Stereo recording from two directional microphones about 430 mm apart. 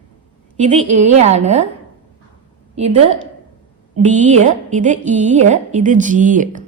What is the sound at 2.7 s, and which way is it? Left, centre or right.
A woman's voice, centre.